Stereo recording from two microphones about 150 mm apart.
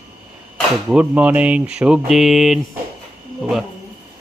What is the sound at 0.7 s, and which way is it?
Speech, 5° right (ahead or behind).